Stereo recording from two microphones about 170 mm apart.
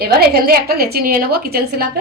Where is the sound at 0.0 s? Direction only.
65° right (ahead or behind).